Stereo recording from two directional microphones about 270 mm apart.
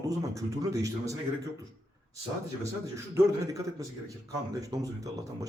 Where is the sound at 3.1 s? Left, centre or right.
Centre.